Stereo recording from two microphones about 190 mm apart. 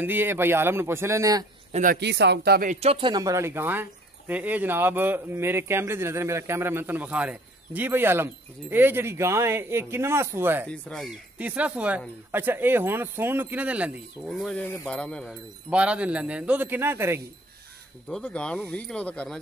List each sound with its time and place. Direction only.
0.0 s speech: 10° right (ahead or behind)
1.7 s speech: 45° right (ahead or behind)
2.0 s speech: 65° right (ahead or behind); by 10.7 s 10° right (ahead or behind)
10.7 s speech: 5° left (ahead or behind)
11.3 s speech: 5° right (ahead or behind)
15.7 s speech: 5° right (ahead or behind)
18.0 s speech: 5° left (ahead or behind)